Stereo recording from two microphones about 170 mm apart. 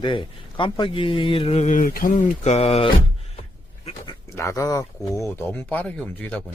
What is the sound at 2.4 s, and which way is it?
Speech, 40° left (ahead or behind).